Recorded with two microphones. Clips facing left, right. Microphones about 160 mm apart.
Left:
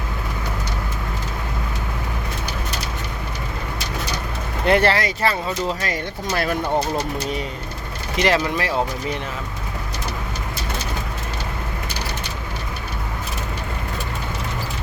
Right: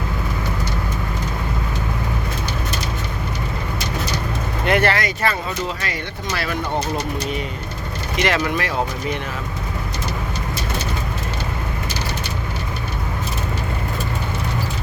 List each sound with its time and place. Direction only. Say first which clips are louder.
4.6 s speech: left 1 dB; 30° left (ahead or behind)
5.8 s speech: left 2 dB; 45° left (ahead or behind)
8.2 s speech: left 1 dB; 30° left (ahead or behind)